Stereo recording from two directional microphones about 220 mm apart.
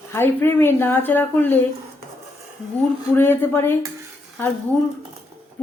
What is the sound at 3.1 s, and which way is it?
Speech, 10° left (ahead or behind).